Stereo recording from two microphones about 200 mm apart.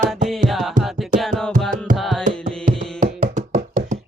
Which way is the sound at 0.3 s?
Centre (ahead or behind).